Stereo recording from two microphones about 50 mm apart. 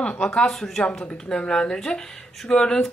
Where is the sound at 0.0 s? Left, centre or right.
Left.